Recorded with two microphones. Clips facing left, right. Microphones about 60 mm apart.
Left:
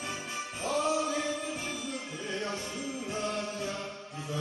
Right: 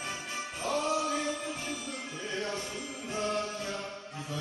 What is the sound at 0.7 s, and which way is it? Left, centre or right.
Music, centre.